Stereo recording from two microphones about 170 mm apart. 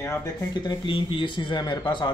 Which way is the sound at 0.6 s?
30° left (ahead or behind).